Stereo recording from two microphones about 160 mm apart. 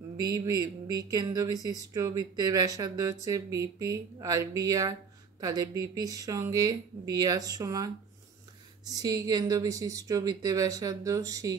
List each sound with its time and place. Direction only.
0.2 s speech: 20° right (ahead or behind)